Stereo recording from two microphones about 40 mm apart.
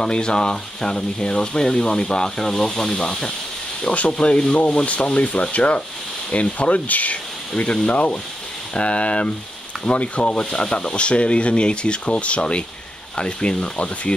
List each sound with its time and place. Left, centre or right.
0.0 s speech: centre
3.8 s speech: left
6.9 s speech: left